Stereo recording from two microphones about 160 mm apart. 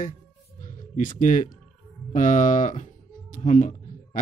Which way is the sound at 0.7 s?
55° left (ahead or behind).